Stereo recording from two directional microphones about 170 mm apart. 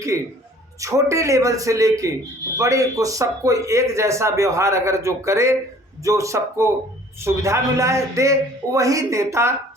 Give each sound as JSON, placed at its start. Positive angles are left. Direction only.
{"t": 0.1, "sound": "a man's voice", "side_deg": -15}